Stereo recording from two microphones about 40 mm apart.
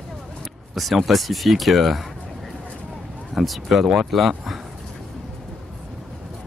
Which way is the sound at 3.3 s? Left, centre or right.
Centre.